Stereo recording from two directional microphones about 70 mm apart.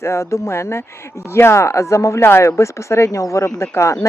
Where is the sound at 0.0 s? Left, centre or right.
Left.